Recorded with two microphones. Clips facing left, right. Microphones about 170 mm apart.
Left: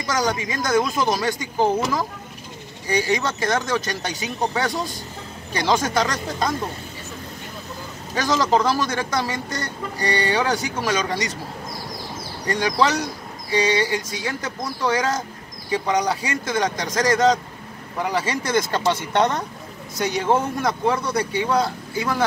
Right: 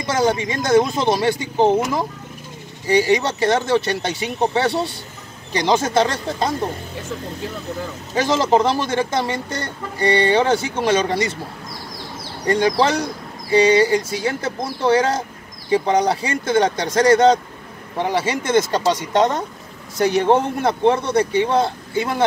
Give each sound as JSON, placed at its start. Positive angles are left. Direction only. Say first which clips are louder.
{"t": 0.0, "sound": "speech", "louder": "right 4 dB", "side_deg": -25}
{"t": 3.2, "sound": "speech", "louder": "right 4 dB", "side_deg": -25}
{"t": 8.1, "sound": "speech", "louder": "right 3 dB", "side_deg": -25}
{"t": 12.4, "sound": "speech", "louder": "right 4 dB", "side_deg": -25}
{"t": 20.2, "sound": "speech", "louder": "right 4 dB", "side_deg": -30}